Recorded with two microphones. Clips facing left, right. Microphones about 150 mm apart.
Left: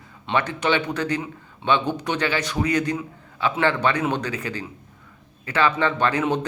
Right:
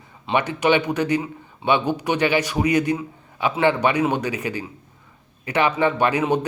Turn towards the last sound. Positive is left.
turn(degrees=-10)  # may be behind; listen again after turning